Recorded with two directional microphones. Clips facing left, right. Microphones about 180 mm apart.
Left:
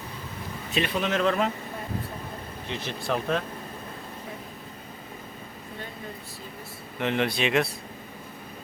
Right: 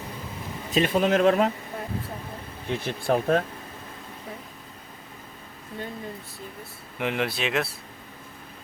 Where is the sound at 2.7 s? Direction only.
50° right (ahead or behind).